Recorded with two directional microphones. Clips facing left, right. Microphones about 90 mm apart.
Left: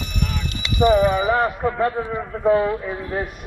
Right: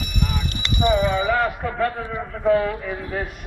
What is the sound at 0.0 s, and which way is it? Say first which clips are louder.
Clip-clop: even; 10° right (ahead or behind).